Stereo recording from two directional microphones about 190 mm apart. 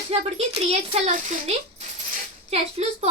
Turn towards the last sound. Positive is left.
turn(degrees=-35)  # may be behind; listen again after turning